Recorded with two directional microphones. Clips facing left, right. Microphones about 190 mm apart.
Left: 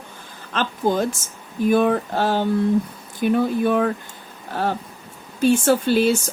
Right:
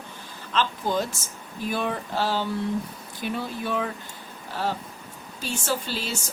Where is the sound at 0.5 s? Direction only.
50° left (ahead or behind).